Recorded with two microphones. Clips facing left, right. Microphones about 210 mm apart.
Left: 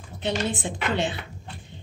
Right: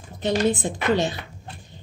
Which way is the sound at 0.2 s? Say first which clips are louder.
Right 6 dB; 40° right (ahead or behind).